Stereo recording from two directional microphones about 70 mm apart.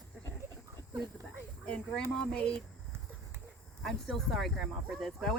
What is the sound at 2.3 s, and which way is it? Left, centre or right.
Speech, centre.